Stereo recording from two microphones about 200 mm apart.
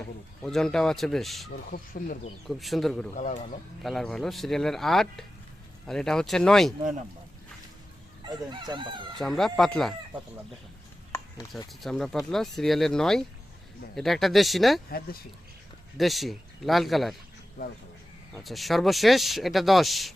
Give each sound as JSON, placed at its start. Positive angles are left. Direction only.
{"t": 0.4, "sound": "speech", "side_deg": 0}
{"t": 1.7, "sound": "speech", "side_deg": 45}
{"t": 2.5, "sound": "speech", "side_deg": 0}
{"t": 3.2, "sound": "speech", "side_deg": 35}
{"t": 3.8, "sound": "speech", "side_deg": 0}
{"t": 8.3, "sound": "crowing", "side_deg": -20}
{"t": 9.1, "sound": "speech", "side_deg": 0}
{"t": 11.5, "sound": "speech", "side_deg": 0}
{"t": 14.8, "sound": "speech", "side_deg": 50}
{"t": 16.0, "sound": "speech", "side_deg": 0}
{"t": 18.4, "sound": "speech", "side_deg": 0}